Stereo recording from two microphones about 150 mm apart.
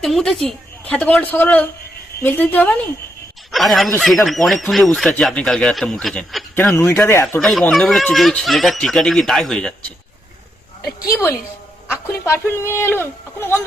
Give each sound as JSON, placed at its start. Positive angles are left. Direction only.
{"t": 0.0, "sound": "a man's voice", "side_deg": 0}
{"t": 3.5, "sound": "speech", "side_deg": 0}
{"t": 6.7, "sound": "a man's voice", "side_deg": 20}
{"t": 7.3, "sound": "speech", "side_deg": 0}
{"t": 10.8, "sound": "a woman's voice", "side_deg": 25}